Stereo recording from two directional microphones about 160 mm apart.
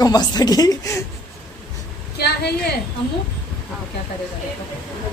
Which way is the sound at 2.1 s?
90° left.